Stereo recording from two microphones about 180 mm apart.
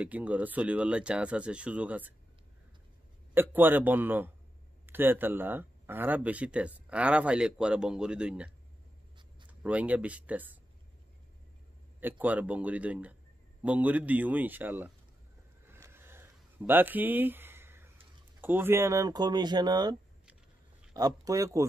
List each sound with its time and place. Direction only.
0.0 s speech: 10° right (ahead or behind)
3.3 s speech: 10° right (ahead or behind)
9.5 s speech: 10° right (ahead or behind)
12.0 s speech: 10° right (ahead or behind)
15.6 s a sound: 15° right (ahead or behind)
18.4 s speech: 10° right (ahead or behind)